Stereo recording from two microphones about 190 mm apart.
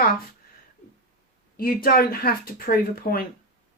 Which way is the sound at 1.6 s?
50° left (ahead or behind).